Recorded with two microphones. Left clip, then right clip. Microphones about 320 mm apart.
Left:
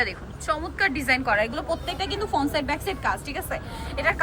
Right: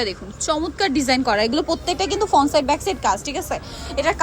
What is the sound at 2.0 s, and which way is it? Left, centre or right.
Speech, right.